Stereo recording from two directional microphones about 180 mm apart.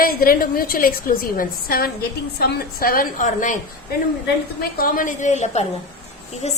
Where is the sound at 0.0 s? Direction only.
55° left (ahead or behind).